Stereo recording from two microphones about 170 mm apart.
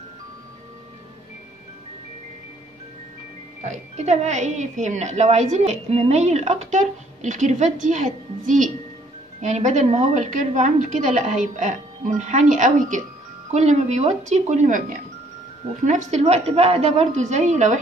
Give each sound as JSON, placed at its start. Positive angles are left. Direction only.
{"t": 3.6, "sound": "a woman's voice", "side_deg": -40}